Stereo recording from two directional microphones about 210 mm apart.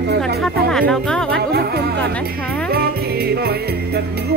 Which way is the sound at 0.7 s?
5° left (ahead or behind).